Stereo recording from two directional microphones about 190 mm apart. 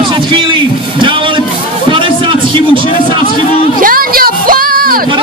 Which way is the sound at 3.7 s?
45° right (ahead or behind).